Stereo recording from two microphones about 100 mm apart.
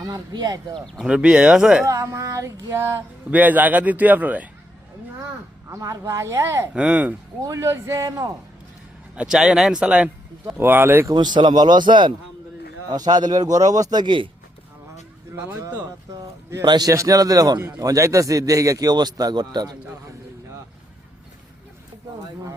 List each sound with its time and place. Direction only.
0.0 s a man's voice: 40° right (ahead or behind)
0.9 s speech: 10° right (ahead or behind)
1.9 s speech: 30° right (ahead or behind)
5.7 s speech: 30° right (ahead or behind)
6.7 s speech: 10° right (ahead or behind)
7.4 s a man's voice: 30° right (ahead or behind)
9.1 s speech: 5° right (ahead or behind)
10.6 s speech: 20° right (ahead or behind)
11.1 s a man's voice: 45° right (ahead or behind)
16.6 s a man's voice: 40° right (ahead or behind)